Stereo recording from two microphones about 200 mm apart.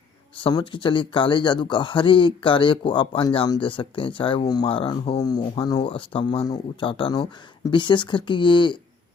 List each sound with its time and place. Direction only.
0.4 s speech: 25° left (ahead or behind)